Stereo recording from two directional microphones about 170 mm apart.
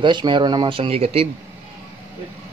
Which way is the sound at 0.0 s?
25° right (ahead or behind).